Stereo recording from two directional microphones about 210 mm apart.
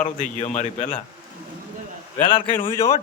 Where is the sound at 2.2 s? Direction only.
25° left (ahead or behind).